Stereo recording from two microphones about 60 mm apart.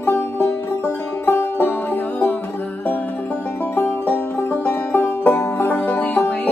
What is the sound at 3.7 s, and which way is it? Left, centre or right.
Music, left.